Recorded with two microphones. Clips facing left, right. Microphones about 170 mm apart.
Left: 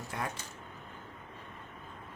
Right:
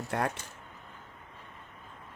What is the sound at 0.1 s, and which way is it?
Speech, 65° right (ahead or behind).